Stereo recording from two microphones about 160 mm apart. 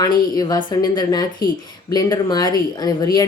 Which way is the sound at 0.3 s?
25° left (ahead or behind).